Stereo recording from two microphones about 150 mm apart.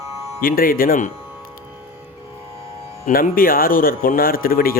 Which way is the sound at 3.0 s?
65° left (ahead or behind).